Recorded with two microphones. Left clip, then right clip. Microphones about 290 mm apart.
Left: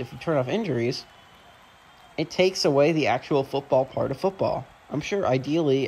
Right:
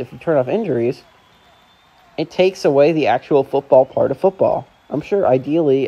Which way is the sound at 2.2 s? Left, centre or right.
Centre.